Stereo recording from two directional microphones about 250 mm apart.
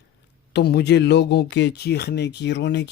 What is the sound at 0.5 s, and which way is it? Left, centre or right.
Speech, left.